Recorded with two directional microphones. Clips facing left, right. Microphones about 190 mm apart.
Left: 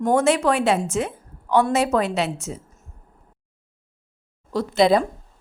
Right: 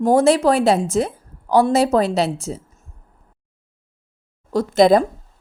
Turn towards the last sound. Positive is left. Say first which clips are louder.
# right 4 dB
turn(degrees=-45)  # may be behind; listen again after turning